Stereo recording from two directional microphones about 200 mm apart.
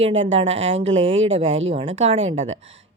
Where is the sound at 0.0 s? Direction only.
30° right (ahead or behind).